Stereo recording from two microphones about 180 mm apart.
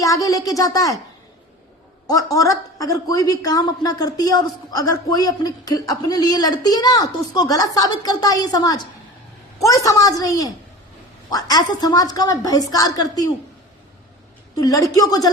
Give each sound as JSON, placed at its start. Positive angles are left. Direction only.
{"t": 0.0, "sound": "speech", "side_deg": 20}
{"t": 2.0, "sound": "speech", "side_deg": 20}
{"t": 14.5, "sound": "speech", "side_deg": 20}